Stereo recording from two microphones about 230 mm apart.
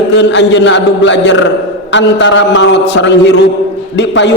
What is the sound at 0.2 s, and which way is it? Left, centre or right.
A man's voice, left.